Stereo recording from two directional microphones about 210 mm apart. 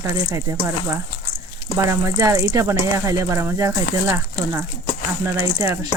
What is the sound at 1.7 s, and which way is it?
Speech, 15° right (ahead or behind).